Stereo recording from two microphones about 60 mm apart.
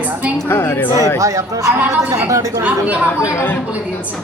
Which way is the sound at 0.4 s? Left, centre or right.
Left.